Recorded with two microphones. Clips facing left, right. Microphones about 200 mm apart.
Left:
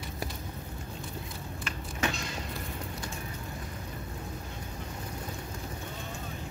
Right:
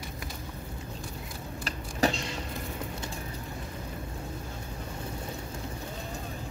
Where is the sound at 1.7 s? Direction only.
35° right (ahead or behind).